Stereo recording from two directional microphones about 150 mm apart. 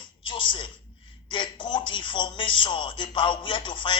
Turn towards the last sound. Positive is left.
turn(degrees=35)  # may be behind; listen again after turning